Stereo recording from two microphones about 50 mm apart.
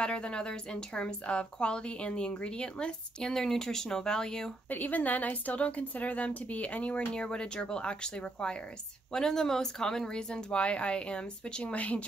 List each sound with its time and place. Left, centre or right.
0.0 s a woman's voice: centre
4.6 s a woman's voice: left
7.1 s a woman's voice: centre